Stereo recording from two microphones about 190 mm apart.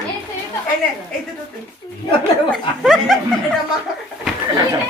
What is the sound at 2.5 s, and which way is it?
Speech, centre (ahead or behind).